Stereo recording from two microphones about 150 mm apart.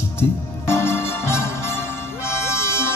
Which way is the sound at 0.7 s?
15° left (ahead or behind).